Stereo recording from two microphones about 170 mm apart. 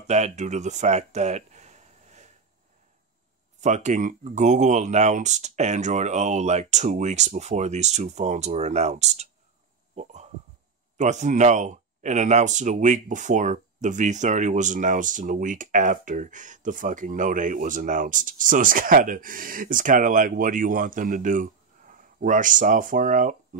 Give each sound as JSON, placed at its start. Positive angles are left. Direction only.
{"t": 0.0, "sound": "speech", "side_deg": -40}
{"t": 3.6, "sound": "speech", "side_deg": -45}
{"t": 9.9, "sound": "a sound", "side_deg": -45}
{"t": 11.0, "sound": "speech", "side_deg": -45}